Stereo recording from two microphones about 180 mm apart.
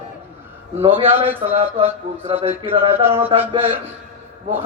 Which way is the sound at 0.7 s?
30° right (ahead or behind).